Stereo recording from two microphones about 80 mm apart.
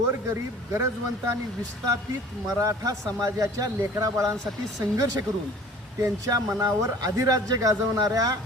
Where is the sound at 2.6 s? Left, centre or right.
Right.